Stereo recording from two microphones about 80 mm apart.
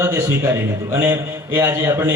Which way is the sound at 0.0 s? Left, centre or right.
Right.